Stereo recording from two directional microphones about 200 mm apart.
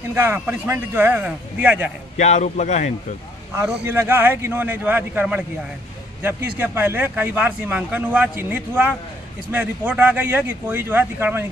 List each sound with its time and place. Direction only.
0.1 s a man's voice: 10° right (ahead or behind)
2.1 s a man's voice: 35° left (ahead or behind)
3.8 s a man's voice: 10° right (ahead or behind)